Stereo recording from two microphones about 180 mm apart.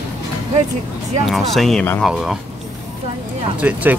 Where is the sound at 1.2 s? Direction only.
Centre (ahead or behind).